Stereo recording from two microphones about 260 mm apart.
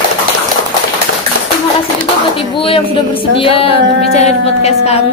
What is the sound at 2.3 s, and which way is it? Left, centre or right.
A woman's voice, left.